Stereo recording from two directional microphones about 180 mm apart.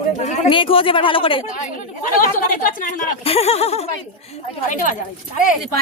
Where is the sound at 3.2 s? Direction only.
35° left (ahead or behind).